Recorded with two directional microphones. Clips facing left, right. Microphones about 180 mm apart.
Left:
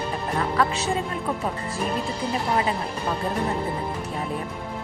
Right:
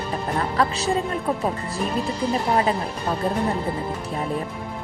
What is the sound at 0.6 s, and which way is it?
Speech, 35° right (ahead or behind).